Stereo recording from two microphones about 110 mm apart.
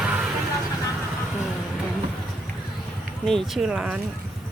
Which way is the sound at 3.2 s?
Centre (ahead or behind).